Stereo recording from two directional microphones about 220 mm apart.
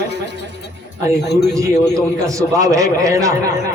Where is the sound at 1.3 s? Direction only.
50° left (ahead or behind).